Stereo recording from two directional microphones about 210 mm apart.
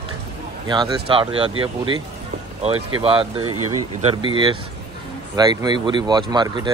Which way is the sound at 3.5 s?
90° right.